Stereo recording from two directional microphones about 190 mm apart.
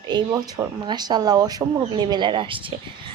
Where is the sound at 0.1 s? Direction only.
20° right (ahead or behind).